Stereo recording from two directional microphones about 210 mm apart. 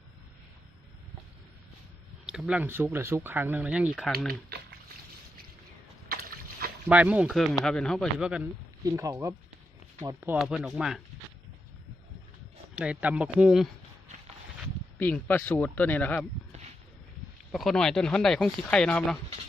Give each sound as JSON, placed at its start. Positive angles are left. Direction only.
{"t": 2.2, "sound": "speech", "side_deg": -5}
{"t": 4.3, "sound": "boiling", "side_deg": -50}
{"t": 6.8, "sound": "speech", "side_deg": -5}
{"t": 8.8, "sound": "speech", "side_deg": -15}
{"t": 10.3, "sound": "speech", "side_deg": 0}
{"t": 12.7, "sound": "speech", "side_deg": -5}
{"t": 14.9, "sound": "speech", "side_deg": 10}
{"t": 17.5, "sound": "speech", "side_deg": 0}